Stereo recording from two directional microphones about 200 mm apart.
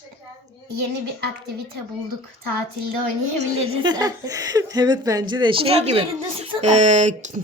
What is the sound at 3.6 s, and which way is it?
Speech, 25° right (ahead or behind).